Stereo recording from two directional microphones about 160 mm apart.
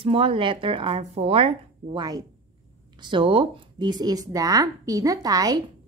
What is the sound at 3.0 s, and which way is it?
A woman's voice, 30° right (ahead or behind).